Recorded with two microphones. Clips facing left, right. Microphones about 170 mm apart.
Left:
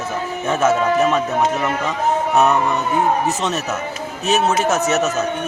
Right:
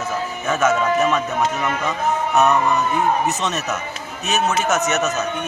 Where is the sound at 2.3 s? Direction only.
30° left (ahead or behind).